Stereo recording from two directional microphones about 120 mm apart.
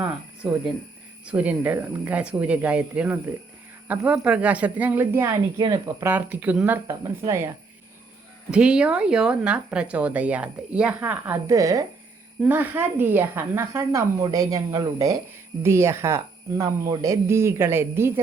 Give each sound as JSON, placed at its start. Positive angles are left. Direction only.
{"t": 1.2, "sound": "speech", "side_deg": -10}
{"t": 5.3, "sound": "speech", "side_deg": -35}
{"t": 6.0, "sound": "speech", "side_deg": -15}
{"t": 6.8, "sound": "speech", "side_deg": -25}
{"t": 8.4, "sound": "speech", "side_deg": -10}
{"t": 11.1, "sound": "speech", "side_deg": -25}
{"t": 12.4, "sound": "speech", "side_deg": -15}
{"t": 17.0, "sound": "speech", "side_deg": -25}